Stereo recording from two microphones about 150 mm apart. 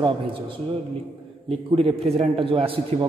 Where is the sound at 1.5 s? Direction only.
40° right (ahead or behind).